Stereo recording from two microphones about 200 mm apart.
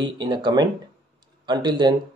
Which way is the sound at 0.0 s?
20° right (ahead or behind).